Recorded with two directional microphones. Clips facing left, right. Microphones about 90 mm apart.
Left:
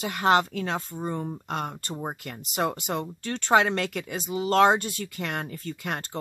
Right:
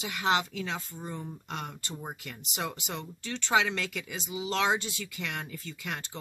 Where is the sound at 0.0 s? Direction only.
50° left (ahead or behind).